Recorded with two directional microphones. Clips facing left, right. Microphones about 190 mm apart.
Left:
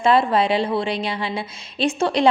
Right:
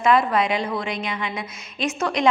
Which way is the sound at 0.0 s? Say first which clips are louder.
Left 2 dB; 30° left (ahead or behind).